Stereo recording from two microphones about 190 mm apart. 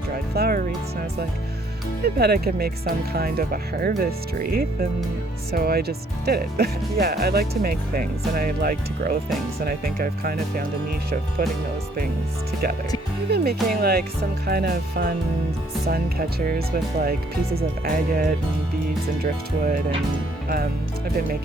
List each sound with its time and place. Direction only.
0.1 s music: 50° right (ahead or behind)
2.0 s speech: 55° right (ahead or behind)
13.2 s speech: 60° right (ahead or behind)